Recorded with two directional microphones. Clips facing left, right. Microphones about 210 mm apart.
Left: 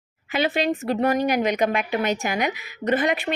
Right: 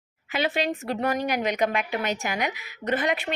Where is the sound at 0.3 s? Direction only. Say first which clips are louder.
Left 4 dB; 20° left (ahead or behind).